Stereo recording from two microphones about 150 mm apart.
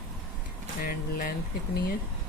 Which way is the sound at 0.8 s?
75° left (ahead or behind).